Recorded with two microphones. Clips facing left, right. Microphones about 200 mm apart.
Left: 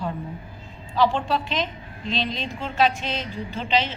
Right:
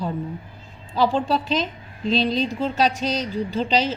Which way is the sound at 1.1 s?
40° right (ahead or behind).